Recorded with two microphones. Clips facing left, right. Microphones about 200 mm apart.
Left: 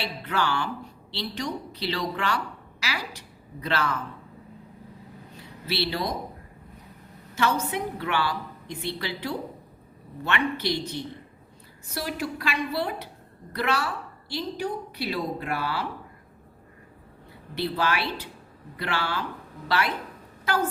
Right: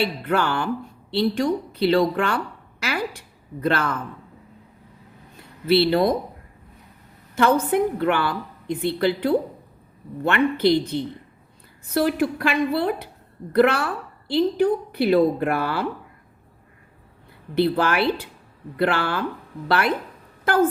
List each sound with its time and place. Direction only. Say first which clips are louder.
0.0 s a woman's voice: right 6 dB; 55° right (ahead or behind)
5.4 s speech: right 11 dB; 55° right (ahead or behind)
7.3 s a woman's voice: right 8 dB; 55° right (ahead or behind)
17.5 s a woman's voice: right 7 dB; 50° right (ahead or behind)